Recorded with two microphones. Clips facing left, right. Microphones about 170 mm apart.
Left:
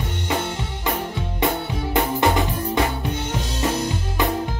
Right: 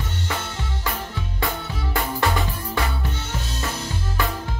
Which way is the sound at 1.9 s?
20° left (ahead or behind).